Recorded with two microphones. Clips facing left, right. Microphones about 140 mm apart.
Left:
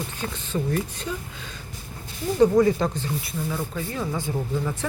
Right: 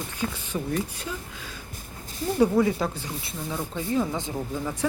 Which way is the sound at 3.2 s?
20° right (ahead or behind).